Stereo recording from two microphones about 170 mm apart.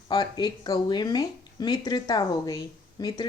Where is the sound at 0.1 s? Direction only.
25° left (ahead or behind).